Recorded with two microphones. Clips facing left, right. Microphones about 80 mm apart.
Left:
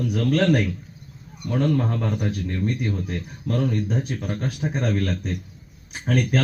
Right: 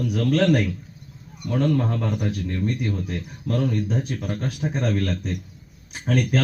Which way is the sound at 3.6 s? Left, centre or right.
Centre.